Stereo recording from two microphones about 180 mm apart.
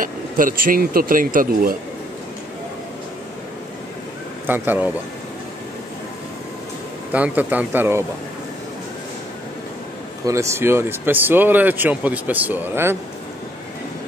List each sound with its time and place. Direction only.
0.0 s speech: 50° right (ahead or behind)
4.5 s speech: 10° right (ahead or behind)
7.1 s speech: 10° right (ahead or behind)
10.2 s speech: 15° right (ahead or behind)